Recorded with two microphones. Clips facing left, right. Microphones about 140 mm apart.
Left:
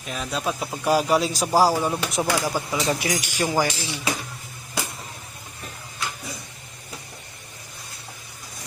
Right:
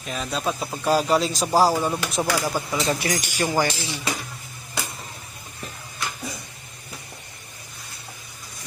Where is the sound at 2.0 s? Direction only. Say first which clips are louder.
Even; 15° left (ahead or behind).